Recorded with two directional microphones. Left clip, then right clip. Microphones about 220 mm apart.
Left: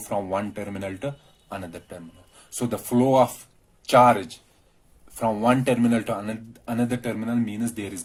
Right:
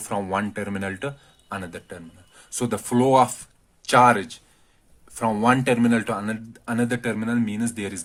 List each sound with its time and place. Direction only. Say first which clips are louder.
0.1 s a man's voice: right 1 dB; 50° right (ahead or behind)